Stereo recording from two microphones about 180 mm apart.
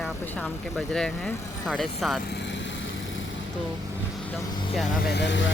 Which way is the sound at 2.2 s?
75° left (ahead or behind).